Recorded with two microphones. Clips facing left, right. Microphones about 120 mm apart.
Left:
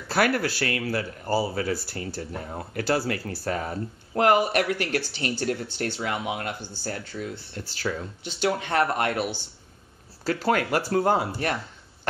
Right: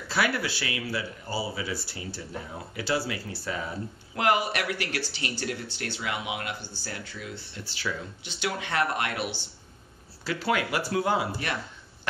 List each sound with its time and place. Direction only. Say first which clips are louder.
0.1 s speech: left 4 dB; 50° left (ahead or behind)